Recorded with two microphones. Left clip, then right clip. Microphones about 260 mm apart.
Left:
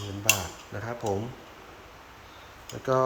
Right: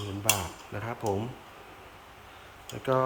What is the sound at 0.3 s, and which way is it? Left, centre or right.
Cutlery, centre.